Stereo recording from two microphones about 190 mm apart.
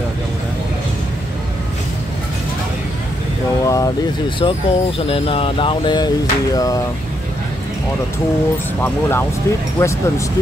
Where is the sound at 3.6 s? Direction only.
20° left (ahead or behind).